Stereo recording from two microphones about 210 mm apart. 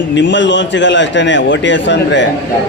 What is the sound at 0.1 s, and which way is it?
A man's voice, 60° left (ahead or behind).